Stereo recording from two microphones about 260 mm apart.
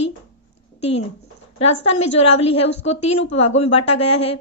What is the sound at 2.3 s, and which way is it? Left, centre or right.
Speech, left.